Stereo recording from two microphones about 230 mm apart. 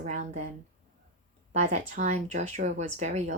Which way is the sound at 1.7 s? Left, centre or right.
Right.